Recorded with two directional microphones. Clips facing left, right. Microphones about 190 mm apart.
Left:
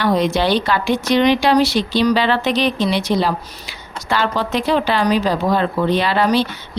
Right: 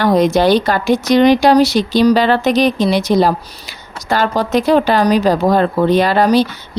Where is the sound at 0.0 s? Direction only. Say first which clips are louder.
Right 5 dB; 45° right (ahead or behind).